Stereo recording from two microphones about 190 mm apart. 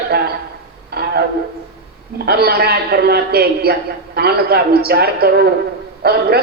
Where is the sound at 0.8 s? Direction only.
55° right (ahead or behind).